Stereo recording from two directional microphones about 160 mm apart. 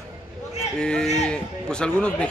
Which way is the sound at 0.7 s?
5° left (ahead or behind).